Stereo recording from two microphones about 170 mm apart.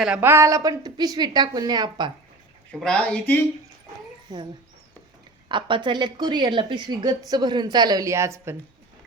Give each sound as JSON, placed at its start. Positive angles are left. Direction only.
{"t": 0.0, "sound": "a woman's voice", "side_deg": -10}
{"t": 2.8, "sound": "speech", "side_deg": 5}
{"t": 4.3, "sound": "a woman's voice", "side_deg": -20}
{"t": 5.5, "sound": "a woman's voice", "side_deg": -30}